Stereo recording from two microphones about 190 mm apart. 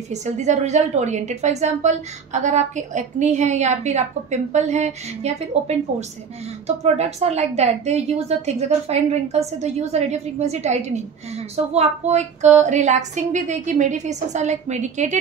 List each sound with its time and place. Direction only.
0.1 s a woman's voice: 40° right (ahead or behind)